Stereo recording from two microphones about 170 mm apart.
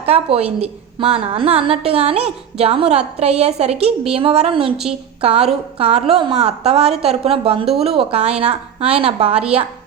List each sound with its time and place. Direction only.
0.0 s a woman's voice: 35° right (ahead or behind)
7.6 s speech: centre (ahead or behind)
7.9 s a woman's voice: 35° right (ahead or behind)